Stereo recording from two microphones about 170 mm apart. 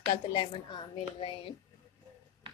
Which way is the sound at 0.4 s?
25° left (ahead or behind).